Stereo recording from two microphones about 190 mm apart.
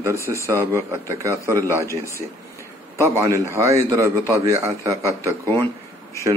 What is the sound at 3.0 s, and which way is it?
A man's voice, 15° right (ahead or behind).